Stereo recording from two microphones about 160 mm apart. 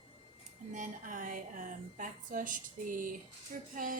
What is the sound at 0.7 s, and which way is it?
A woman's voice, 55° right (ahead or behind).